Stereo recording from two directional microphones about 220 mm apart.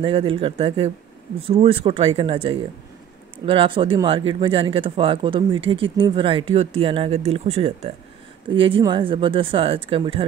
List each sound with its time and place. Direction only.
0.0 s speech: 25° right (ahead or behind)